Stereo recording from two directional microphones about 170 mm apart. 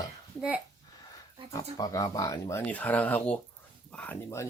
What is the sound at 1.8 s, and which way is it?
Speech, 20° left (ahead or behind).